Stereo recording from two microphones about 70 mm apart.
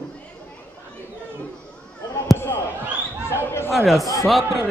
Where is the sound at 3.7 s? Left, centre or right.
Centre.